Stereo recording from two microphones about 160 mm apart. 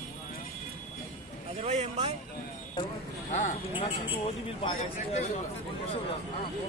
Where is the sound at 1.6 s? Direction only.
40° right (ahead or behind).